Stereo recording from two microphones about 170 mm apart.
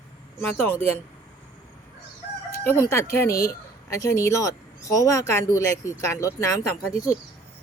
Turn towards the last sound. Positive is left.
turn(degrees=20)  # may be behind; listen again after turning